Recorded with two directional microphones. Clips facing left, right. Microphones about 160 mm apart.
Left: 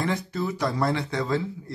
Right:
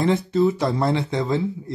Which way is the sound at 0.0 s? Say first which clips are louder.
Right 9 dB; 25° right (ahead or behind).